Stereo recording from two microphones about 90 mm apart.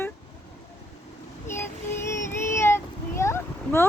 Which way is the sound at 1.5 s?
30° left (ahead or behind).